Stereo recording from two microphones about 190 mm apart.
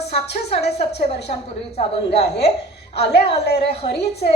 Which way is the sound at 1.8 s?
30° left (ahead or behind).